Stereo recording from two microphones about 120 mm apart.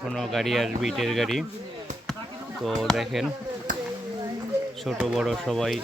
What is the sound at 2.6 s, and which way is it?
Speech, centre (ahead or behind).